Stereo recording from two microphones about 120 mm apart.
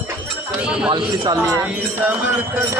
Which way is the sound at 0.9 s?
40° right (ahead or behind).